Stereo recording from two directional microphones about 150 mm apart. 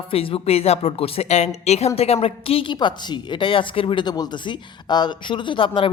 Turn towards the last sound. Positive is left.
turn(degrees=35)  # may be behind; listen again after turning